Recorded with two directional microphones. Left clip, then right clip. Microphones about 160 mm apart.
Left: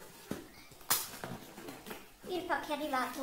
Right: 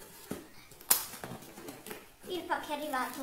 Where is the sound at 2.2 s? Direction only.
30° left (ahead or behind).